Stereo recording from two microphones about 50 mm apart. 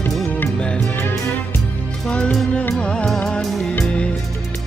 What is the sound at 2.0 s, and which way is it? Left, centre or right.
Music, left.